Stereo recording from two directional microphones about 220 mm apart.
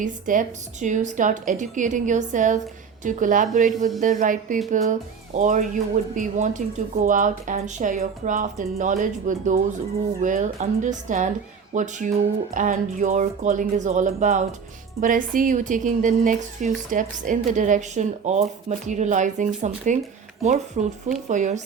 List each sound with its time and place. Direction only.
0.0 s speech: 35° right (ahead or behind)